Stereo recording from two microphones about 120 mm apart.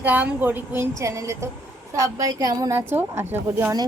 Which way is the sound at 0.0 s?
15° right (ahead or behind).